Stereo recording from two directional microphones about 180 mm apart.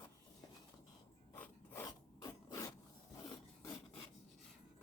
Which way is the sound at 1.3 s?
15° left (ahead or behind).